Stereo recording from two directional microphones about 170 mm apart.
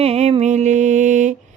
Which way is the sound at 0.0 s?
40° right (ahead or behind).